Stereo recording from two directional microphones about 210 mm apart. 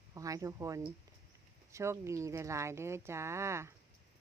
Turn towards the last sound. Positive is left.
turn(degrees=-15)  # may be behind; listen again after turning